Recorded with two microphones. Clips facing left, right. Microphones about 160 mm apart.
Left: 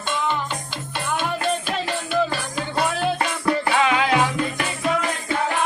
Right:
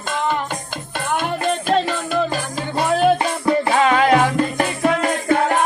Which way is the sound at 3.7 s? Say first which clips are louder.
Right 6 dB; 40° right (ahead or behind).